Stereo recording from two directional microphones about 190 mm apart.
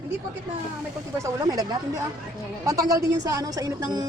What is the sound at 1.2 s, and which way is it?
Speech, 20° right (ahead or behind).